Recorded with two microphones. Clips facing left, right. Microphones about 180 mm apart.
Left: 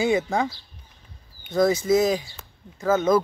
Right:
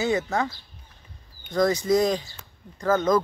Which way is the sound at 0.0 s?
10° left (ahead or behind).